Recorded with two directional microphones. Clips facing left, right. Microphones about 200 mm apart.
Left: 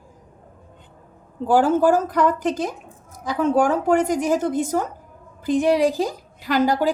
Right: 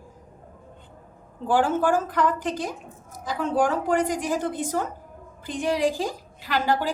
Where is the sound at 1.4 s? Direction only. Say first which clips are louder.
Left 5 dB; 40° left (ahead or behind).